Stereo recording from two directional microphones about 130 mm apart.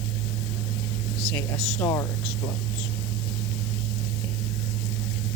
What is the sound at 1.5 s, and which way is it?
Speech, 5° left (ahead or behind).